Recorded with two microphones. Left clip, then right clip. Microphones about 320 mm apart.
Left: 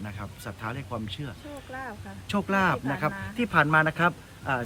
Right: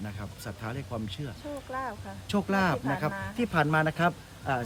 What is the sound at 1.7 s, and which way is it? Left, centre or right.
Speech, right.